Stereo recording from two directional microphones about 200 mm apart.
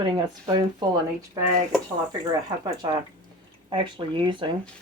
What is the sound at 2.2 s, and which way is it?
Speech, 20° right (ahead or behind).